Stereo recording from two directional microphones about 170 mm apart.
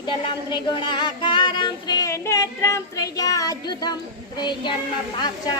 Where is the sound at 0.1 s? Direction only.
30° left (ahead or behind).